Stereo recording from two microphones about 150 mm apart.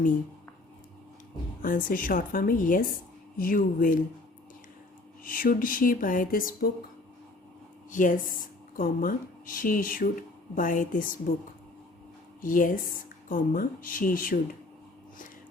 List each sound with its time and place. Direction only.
1.6 s a woman's voice: 65° left (ahead or behind)
5.2 s speech: 65° left (ahead or behind); by 6.7 s 80° left
7.9 s speech: 60° left (ahead or behind)
12.4 s speech: 65° left (ahead or behind)